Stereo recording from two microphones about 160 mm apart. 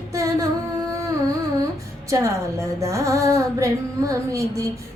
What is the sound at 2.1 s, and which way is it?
Female singing, 20° right (ahead or behind).